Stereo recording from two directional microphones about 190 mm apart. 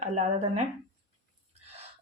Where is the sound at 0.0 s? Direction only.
35° right (ahead or behind).